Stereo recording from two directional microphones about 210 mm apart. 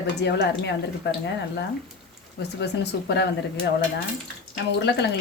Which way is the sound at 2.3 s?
55° left (ahead or behind).